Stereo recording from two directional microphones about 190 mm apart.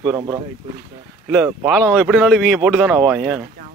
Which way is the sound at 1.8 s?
Centre (ahead or behind).